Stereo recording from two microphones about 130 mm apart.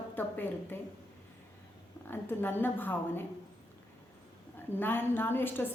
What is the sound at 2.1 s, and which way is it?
A woman's voice, 15° left (ahead or behind).